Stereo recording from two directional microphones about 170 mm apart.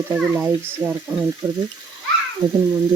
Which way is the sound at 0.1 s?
10° right (ahead or behind).